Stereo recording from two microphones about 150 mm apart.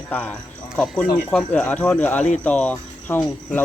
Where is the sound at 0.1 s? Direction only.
10° left (ahead or behind).